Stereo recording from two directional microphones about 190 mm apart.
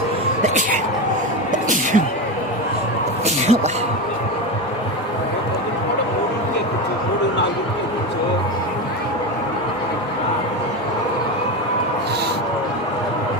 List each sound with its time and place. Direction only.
3.2 s music: 35° right (ahead or behind)